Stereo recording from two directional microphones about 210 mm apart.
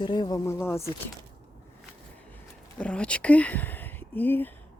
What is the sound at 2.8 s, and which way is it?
Speech, 5° left (ahead or behind).